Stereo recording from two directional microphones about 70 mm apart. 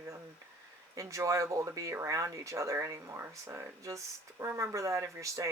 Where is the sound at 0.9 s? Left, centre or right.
Right.